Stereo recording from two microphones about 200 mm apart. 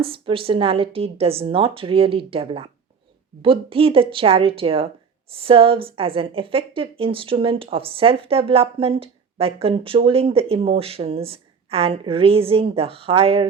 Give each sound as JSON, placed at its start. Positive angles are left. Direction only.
{"t": 0.0, "sound": "a woman's voice", "side_deg": -25}